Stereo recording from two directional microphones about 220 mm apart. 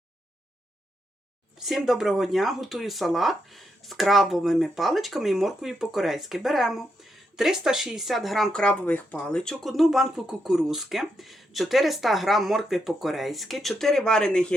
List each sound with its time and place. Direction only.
1.5 s speech: centre (ahead or behind)